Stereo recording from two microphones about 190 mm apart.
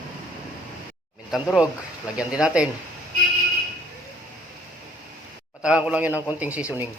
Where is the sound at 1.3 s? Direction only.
5° right (ahead or behind).